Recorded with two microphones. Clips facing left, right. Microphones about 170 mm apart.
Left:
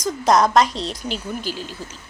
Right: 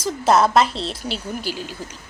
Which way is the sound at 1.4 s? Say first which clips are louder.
Right 1 dB; 10° right (ahead or behind).